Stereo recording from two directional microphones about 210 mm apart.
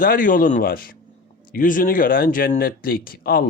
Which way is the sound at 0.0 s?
40° left (ahead or behind).